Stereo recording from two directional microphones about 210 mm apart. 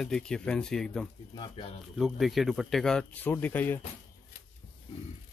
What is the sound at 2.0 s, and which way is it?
Speech, centre (ahead or behind).